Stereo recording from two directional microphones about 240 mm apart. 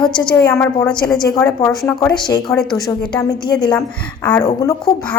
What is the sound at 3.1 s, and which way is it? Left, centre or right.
A woman's voice, centre.